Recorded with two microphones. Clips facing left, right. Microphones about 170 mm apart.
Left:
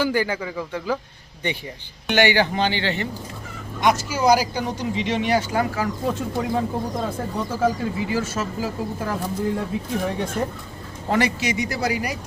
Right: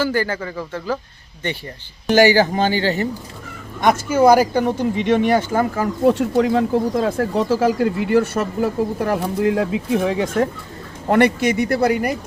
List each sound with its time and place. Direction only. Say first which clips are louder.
0.0 s a man's voice: right 2 dB; 15° left (ahead or behind)
2.0 s a man's voice: right 6 dB; 40° right (ahead or behind)
3.8 s speech: right 5 dB; 50° right (ahead or behind)
6.1 s speech: right 7 dB; 75° right (ahead or behind); by 10.5 s 90° right
11.1 s speech: right 7 dB; 55° right (ahead or behind)